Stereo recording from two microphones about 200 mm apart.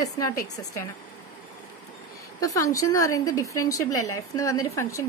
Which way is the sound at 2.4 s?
15° left (ahead or behind).